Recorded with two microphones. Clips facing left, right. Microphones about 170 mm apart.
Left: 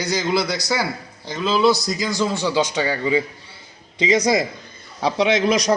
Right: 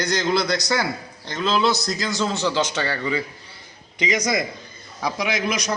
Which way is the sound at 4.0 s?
25° left (ahead or behind).